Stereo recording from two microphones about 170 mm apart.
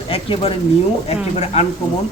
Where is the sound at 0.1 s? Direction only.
35° left (ahead or behind).